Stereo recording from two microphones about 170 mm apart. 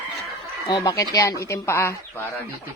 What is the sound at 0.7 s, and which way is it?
Speech, 25° left (ahead or behind).